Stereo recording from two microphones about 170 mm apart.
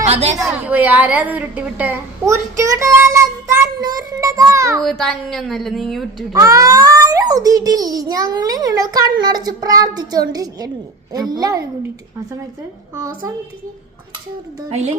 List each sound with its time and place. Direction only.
0.1 s a woman's voice: 40° right (ahead or behind)
0.4 s a woman's voice: 10° right (ahead or behind)
4.8 s a woman's voice: centre (ahead or behind)
6.3 s a child's voice: 20° right (ahead or behind)